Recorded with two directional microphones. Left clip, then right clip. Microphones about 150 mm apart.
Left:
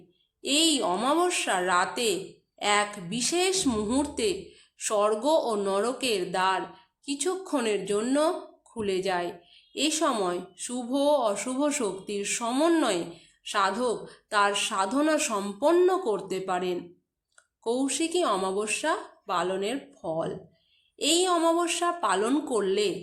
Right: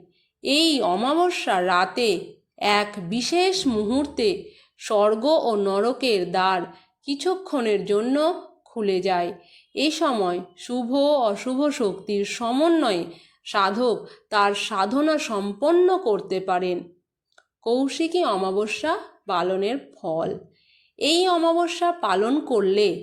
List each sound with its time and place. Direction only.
0.4 s a woman's voice: 30° right (ahead or behind)